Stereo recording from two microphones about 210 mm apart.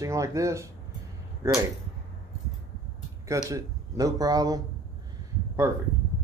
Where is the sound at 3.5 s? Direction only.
15° right (ahead or behind).